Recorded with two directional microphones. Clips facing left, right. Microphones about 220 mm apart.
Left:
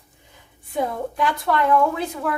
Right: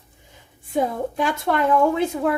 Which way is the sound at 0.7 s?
25° right (ahead or behind).